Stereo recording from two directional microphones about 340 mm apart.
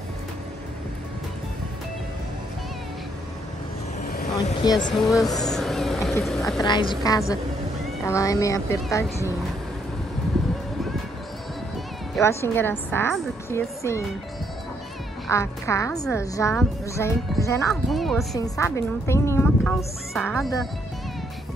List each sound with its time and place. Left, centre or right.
4.0 s vehicle: left
4.5 s a woman's voice: centre
4.9 s speech: centre
6.6 s a woman's voice: centre
12.2 s a woman's voice: centre
15.2 s a woman's voice: centre